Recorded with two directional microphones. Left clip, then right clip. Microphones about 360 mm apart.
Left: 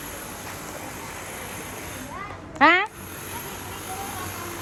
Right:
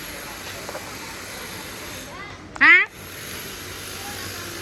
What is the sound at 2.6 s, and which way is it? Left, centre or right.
Speech, centre.